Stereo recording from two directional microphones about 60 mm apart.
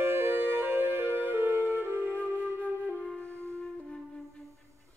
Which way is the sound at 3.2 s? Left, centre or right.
Left.